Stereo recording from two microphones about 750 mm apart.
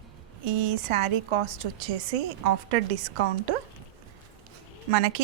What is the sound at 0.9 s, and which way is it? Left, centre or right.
A woman's voice, right.